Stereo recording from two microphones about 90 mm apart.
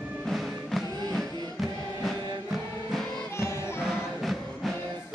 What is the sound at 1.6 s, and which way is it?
Music, centre (ahead or behind).